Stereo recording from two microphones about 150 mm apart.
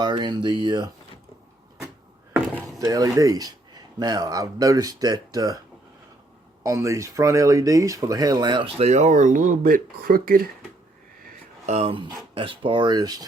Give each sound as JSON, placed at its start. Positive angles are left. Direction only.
{"t": 0.0, "sound": "speech", "side_deg": -30}
{"t": 2.6, "sound": "speech", "side_deg": -25}
{"t": 6.6, "sound": "speech", "side_deg": -20}
{"t": 11.6, "sound": "speech", "side_deg": -45}